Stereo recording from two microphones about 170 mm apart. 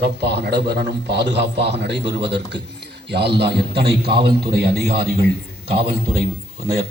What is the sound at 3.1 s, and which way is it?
A man's voice, 75° right (ahead or behind).